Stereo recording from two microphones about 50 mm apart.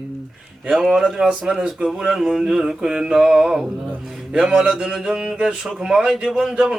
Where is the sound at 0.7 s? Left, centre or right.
Centre.